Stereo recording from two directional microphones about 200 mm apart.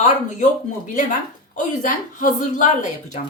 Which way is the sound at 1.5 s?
40° left (ahead or behind).